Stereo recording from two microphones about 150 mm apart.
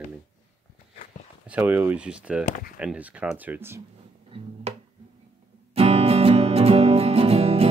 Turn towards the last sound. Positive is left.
turn(degrees=-40)  # may be behind; listen again after turning